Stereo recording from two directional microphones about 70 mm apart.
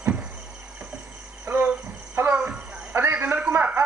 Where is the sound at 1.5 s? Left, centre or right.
Right.